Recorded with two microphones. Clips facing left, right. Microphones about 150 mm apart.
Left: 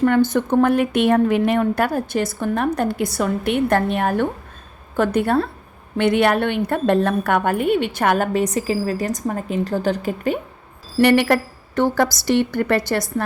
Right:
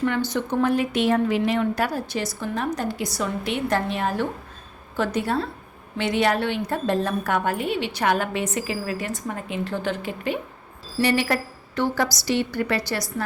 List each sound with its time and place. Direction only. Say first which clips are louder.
0.0 s a woman's voice: left 7 dB; 50° left (ahead or behind)
10.9 s a woman's voice: left 7 dB; 60° left (ahead or behind)